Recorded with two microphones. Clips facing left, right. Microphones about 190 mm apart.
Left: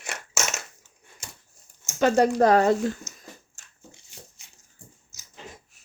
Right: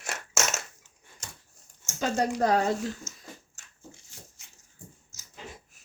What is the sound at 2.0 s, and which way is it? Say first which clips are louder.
Speech: left 7 dB; 70° left (ahead or behind).